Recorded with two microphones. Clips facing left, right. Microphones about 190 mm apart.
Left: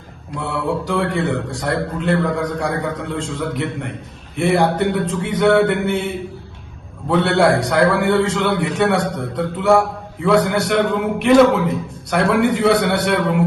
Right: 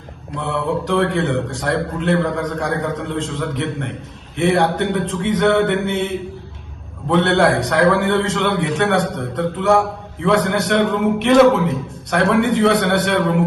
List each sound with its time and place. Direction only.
0.3 s a man's voice: centre (ahead or behind)
7.1 s a man's voice: centre (ahead or behind)